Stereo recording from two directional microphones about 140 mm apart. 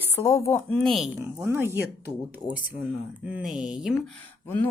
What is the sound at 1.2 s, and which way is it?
Speech, 15° right (ahead or behind).